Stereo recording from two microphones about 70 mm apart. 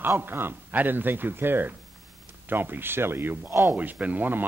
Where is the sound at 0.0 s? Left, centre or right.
Right.